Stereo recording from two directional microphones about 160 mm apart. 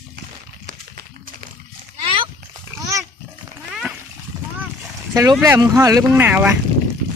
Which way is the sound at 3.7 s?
5° right (ahead or behind).